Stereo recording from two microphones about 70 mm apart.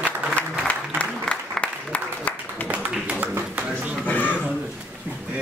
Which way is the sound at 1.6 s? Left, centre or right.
Left.